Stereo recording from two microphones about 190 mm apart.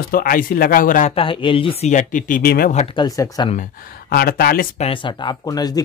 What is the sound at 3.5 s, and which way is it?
Speech, 45° left (ahead or behind).